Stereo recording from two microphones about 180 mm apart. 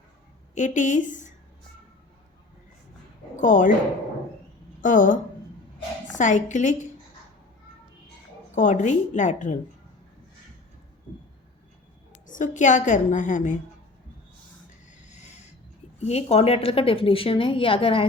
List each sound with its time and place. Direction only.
0.5 s a woman's voice: 45° left (ahead or behind)
3.3 s a woman's voice: 45° left (ahead or behind)
4.8 s a woman's voice: 45° left (ahead or behind)
6.1 s a woman's voice: 40° left (ahead or behind)
8.5 s a woman's voice: 40° left (ahead or behind)
12.2 s a woman's voice: 45° left (ahead or behind)
14.8 s a sound: 40° left (ahead or behind)
16.0 s a woman's voice: 35° left (ahead or behind)